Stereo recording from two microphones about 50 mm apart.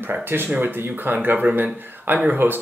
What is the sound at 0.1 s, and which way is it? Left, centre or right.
Speech, right.